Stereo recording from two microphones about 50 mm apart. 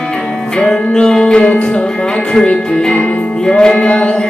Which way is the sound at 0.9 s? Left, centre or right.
Centre.